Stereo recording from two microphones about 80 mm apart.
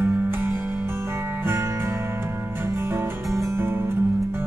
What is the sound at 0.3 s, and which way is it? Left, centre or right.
Music, right.